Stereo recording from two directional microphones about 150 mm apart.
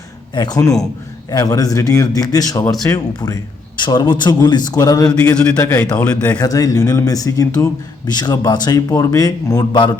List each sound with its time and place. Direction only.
0.3 s speech: 25° left (ahead or behind)
5.1 s a man's voice: 10° left (ahead or behind)
6.4 s speech: 25° left (ahead or behind)